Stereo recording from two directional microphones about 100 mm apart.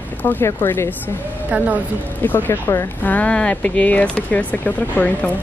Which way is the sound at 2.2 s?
20° left (ahead or behind).